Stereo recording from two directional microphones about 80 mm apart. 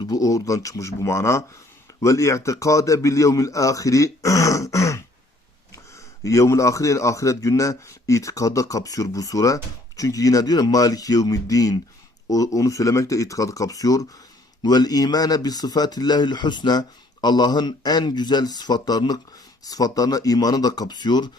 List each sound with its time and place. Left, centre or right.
0.1 s speech: left
6.2 s speech: left